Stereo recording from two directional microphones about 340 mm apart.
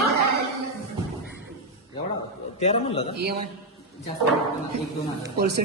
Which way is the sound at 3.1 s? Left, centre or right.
Right.